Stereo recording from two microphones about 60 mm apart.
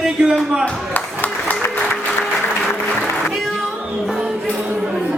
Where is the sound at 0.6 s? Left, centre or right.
Left.